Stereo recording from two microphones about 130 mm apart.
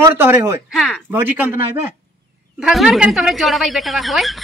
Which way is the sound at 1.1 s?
15° right (ahead or behind).